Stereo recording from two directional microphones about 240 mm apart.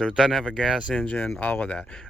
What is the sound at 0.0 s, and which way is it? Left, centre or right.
Speech, centre.